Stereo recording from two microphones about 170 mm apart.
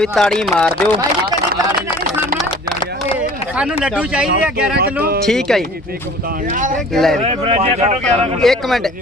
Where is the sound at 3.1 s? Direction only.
5° right (ahead or behind).